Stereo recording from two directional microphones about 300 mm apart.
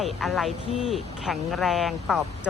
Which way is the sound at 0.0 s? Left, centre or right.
Centre.